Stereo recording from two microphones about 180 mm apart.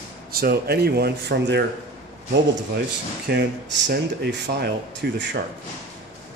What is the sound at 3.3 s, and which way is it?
Speech, 65° right (ahead or behind).